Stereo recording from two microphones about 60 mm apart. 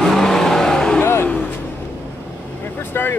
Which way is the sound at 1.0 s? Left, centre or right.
Left.